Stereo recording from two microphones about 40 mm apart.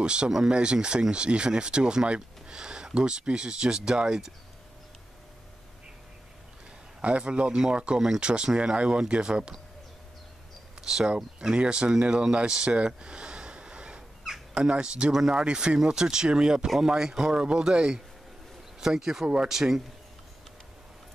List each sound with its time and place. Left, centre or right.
0.0 s speech: right
7.0 s speech: right
10.8 s speech: centre
11.3 s speech: right
12.7 s a sound: right
14.5 s speech: right
15.1 s speech: centre
15.4 s speech: right